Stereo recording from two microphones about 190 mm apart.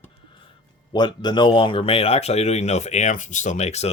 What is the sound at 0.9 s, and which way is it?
Speech, 25° left (ahead or behind).